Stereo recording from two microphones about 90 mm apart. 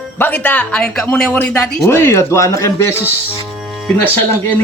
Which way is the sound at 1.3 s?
25° left (ahead or behind).